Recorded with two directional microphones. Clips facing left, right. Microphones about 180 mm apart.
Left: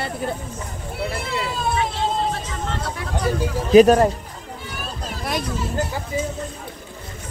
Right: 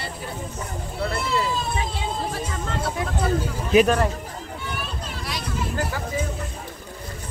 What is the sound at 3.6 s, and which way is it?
Speech, 40° left (ahead or behind).